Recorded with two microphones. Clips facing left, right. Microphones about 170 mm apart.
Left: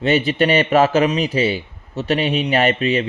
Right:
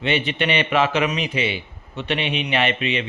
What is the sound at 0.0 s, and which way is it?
A man's voice, 40° left (ahead or behind).